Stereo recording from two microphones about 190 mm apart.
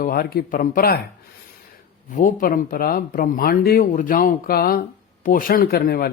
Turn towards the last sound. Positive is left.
turn(degrees=55)  # may be behind; listen again after turning